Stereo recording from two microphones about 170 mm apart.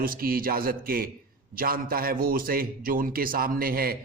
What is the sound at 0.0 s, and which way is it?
A man's voice, 60° right (ahead or behind).